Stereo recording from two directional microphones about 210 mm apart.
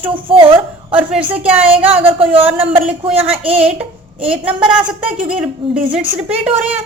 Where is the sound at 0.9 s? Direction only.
5° right (ahead or behind).